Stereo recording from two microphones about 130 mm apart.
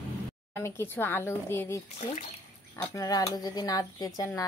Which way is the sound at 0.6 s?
15° left (ahead or behind).